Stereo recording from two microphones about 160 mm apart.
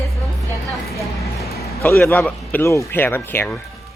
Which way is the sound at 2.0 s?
5° left (ahead or behind).